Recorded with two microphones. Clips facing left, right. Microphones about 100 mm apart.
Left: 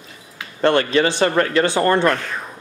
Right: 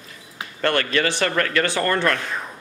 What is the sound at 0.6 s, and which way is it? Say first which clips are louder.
Speech: left 5 dB; 25° left (ahead or behind).